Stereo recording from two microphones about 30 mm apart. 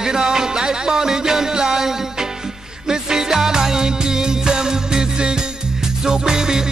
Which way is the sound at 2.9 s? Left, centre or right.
Centre.